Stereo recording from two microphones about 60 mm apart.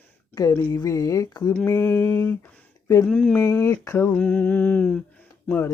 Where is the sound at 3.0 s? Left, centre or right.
Left.